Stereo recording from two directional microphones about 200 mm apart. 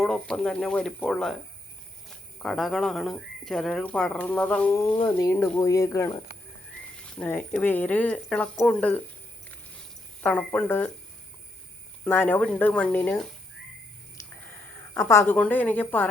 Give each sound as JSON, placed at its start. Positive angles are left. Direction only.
{"t": 0.0, "sound": "speech", "side_deg": 5}
{"t": 7.2, "sound": "speech", "side_deg": 5}
{"t": 10.2, "sound": "speech", "side_deg": 5}
{"t": 12.0, "sound": "speech", "side_deg": 10}
{"t": 14.9, "sound": "speech", "side_deg": 15}